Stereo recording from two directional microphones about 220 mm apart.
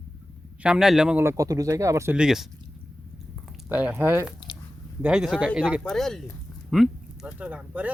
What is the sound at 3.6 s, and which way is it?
Speech, 5° right (ahead or behind).